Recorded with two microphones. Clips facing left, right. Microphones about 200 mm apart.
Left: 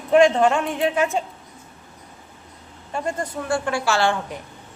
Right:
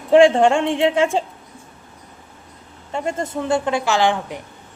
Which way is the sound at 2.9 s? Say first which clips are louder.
Right 3 dB; 25° right (ahead or behind).